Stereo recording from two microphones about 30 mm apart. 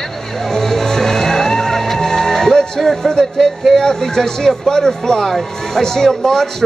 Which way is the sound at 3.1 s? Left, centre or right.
Left.